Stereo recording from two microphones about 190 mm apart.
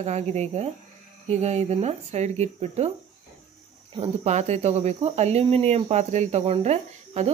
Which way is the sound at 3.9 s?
30° right (ahead or behind).